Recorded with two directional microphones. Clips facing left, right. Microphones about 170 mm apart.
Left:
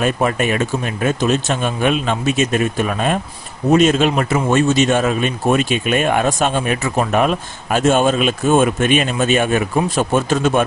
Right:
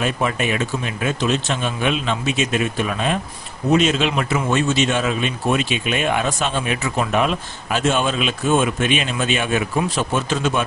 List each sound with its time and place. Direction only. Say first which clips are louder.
0.0 s speech: left 4 dB; 45° left (ahead or behind)